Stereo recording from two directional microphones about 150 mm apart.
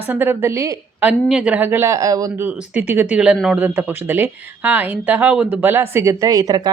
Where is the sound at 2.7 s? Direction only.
15° right (ahead or behind).